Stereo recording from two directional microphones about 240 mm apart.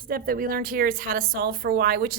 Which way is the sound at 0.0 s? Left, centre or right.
Right.